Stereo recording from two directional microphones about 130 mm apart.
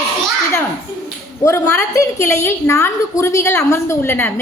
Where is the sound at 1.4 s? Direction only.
20° left (ahead or behind).